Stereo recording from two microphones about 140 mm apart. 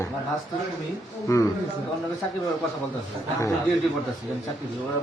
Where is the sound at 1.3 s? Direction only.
25° left (ahead or behind).